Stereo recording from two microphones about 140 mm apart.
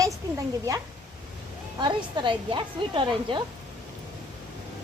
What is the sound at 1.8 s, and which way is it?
A woman's voice, 35° right (ahead or behind).